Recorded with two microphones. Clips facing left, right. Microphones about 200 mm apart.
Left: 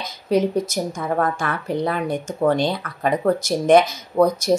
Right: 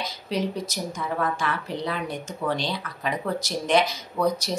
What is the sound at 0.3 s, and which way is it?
Speech, 50° left (ahead or behind).